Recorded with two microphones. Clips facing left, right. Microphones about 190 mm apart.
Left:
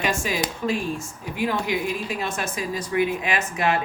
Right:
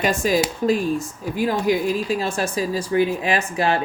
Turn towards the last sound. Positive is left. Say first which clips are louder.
# right 3 dB
turn(degrees=-35)  # may be behind; listen again after turning